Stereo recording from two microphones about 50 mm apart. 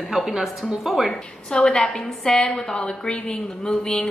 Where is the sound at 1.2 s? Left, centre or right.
Centre.